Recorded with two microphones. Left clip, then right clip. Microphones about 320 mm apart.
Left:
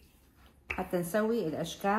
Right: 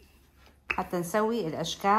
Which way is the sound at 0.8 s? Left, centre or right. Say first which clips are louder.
Right 2 dB; right.